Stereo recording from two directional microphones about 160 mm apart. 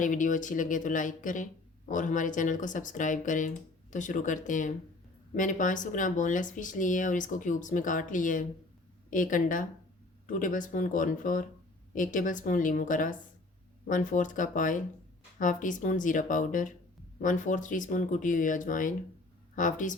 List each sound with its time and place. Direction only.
0.0 s speech: 55° left (ahead or behind)